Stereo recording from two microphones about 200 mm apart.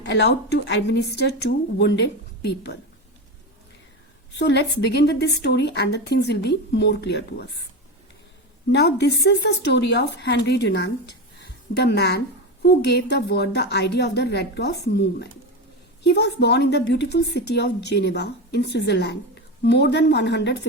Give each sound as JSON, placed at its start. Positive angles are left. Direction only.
{"t": 0.0, "sound": "a woman's voice", "side_deg": 60}
{"t": 4.3, "sound": "a woman's voice", "side_deg": 55}
{"t": 8.7, "sound": "a woman's voice", "side_deg": 55}